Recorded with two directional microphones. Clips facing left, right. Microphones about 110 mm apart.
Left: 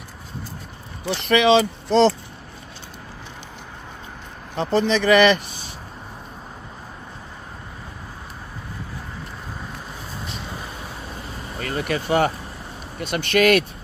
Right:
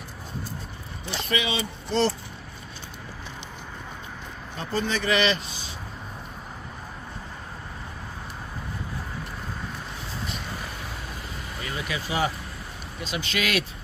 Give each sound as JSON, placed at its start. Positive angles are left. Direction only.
{"t": 1.0, "sound": "speech", "side_deg": 75}
{"t": 4.6, "sound": "speech", "side_deg": 85}
{"t": 11.6, "sound": "speech", "side_deg": 50}